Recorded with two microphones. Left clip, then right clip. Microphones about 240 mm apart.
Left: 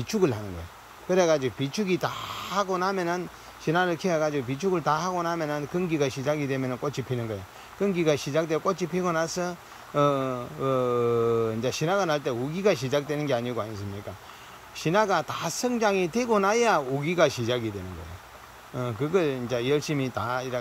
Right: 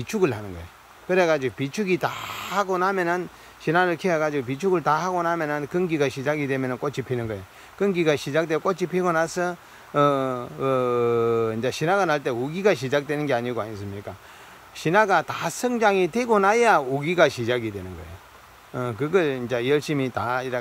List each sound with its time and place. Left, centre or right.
0.0 s speech: centre
14.8 s speech: centre
18.8 s speech: centre